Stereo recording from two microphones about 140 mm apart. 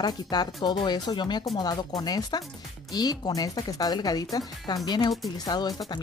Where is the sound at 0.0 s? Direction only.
30° left (ahead or behind).